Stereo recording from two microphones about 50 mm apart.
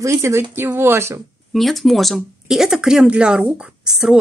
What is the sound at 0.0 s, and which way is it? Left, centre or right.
Speech, right.